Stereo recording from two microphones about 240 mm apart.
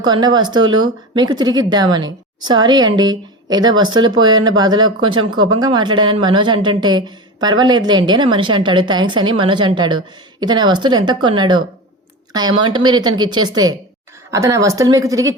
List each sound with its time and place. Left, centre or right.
0.0 s a woman's voice: centre